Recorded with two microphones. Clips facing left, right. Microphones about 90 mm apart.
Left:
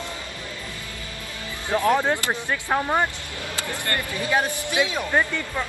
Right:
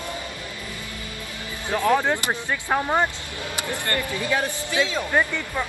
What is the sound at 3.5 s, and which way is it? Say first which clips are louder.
Speech: right 1 dB; 20° right (ahead or behind).